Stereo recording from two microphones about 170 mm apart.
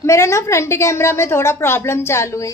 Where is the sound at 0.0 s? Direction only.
15° left (ahead or behind).